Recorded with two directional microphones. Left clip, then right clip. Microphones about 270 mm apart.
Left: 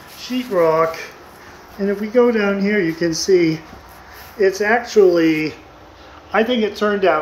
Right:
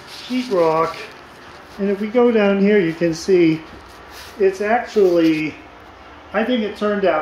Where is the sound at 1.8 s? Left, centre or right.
Centre.